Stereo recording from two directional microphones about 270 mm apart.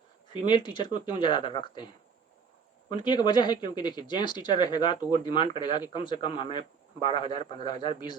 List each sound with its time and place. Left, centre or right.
0.4 s speech: centre
2.9 s speech: centre